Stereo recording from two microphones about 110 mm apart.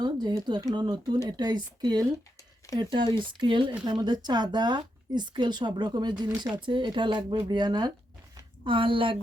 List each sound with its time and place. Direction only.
0.0 s a woman's voice: 40° right (ahead or behind)
8.6 s speech: 50° right (ahead or behind)